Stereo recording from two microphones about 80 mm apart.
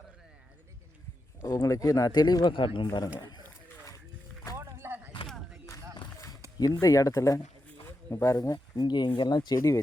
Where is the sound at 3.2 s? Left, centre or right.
Left.